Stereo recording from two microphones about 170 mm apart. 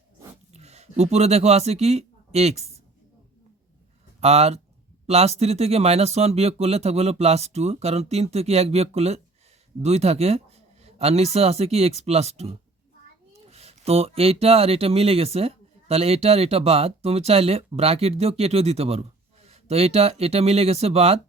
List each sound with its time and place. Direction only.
0.5 s speech: 40° right (ahead or behind)
4.2 s speech: 40° right (ahead or behind)